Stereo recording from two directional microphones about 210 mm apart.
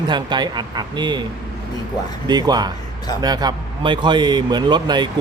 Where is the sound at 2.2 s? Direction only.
20° right (ahead or behind).